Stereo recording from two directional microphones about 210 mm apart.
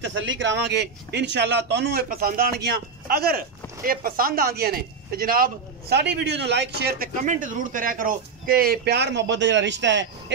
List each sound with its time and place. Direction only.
0.0 s a man's voice: 65° right (ahead or behind)